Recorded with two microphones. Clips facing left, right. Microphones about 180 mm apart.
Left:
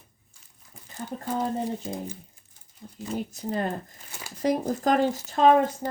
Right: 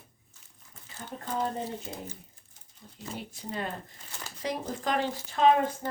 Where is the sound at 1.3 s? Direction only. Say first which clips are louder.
Left 4 dB; 10° left (ahead or behind).